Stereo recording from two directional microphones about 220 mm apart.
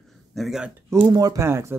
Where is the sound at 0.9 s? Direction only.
20° right (ahead or behind).